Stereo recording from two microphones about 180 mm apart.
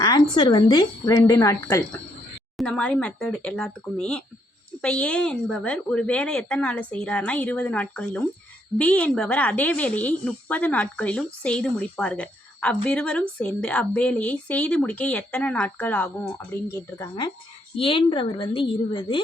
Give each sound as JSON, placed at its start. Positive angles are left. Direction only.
{"t": 0.0, "sound": "a woman's voice", "side_deg": 25}
{"t": 2.6, "sound": "a woman's voice", "side_deg": 5}
{"t": 17.7, "sound": "a woman's voice", "side_deg": 30}